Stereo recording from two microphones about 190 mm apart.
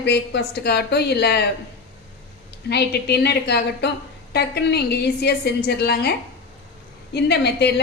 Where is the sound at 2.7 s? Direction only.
60° left (ahead or behind).